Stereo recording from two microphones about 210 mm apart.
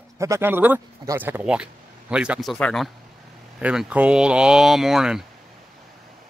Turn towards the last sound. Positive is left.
turn(degrees=0)  # may be behind; listen again after turning